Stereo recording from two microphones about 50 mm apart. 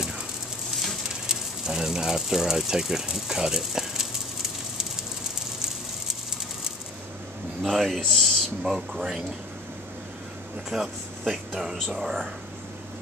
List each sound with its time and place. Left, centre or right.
1.0 s speech: centre
7.6 s speech: centre
8.6 s speech: centre
10.7 s speech: centre